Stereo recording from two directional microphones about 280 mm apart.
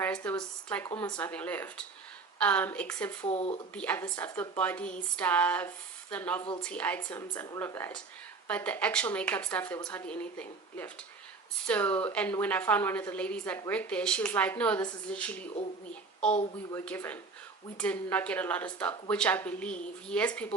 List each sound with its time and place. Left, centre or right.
0.0 s a woman's voice: centre
3.2 s speech: left
3.8 s a woman's voice: centre